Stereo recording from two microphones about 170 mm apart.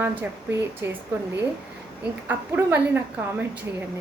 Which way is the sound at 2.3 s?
10° right (ahead or behind).